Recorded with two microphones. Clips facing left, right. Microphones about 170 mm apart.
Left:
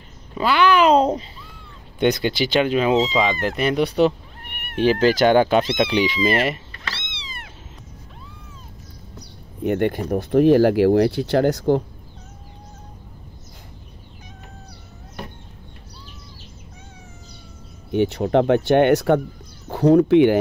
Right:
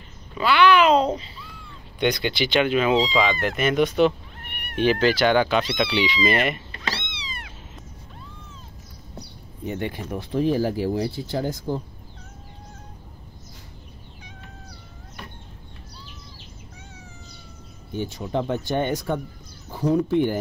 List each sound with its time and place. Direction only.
0.3 s speech: 40° left (ahead or behind)
9.6 s speech: 60° left (ahead or behind)
10.3 s speech: 70° left (ahead or behind)
17.9 s speech: 70° left (ahead or behind)